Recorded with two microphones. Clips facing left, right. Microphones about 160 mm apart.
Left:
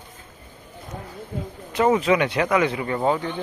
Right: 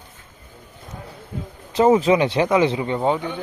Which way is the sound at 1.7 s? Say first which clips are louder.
Right 3 dB; 30° right (ahead or behind).